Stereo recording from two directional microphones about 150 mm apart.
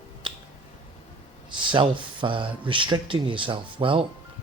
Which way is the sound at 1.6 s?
35° right (ahead or behind).